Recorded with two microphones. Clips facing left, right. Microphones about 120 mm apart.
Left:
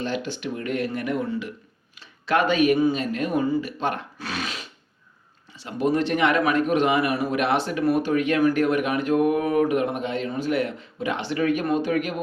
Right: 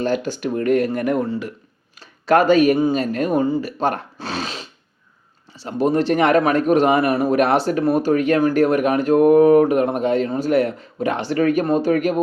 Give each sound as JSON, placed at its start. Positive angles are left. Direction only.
{"t": 0.0, "sound": "a man's voice", "side_deg": -45}